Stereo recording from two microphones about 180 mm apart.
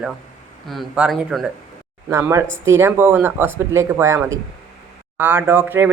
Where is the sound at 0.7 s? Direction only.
Centre (ahead or behind).